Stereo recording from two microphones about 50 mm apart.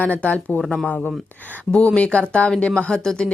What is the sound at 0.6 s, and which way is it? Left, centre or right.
Speech, centre.